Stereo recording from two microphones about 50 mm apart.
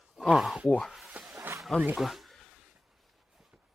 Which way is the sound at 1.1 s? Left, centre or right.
Right.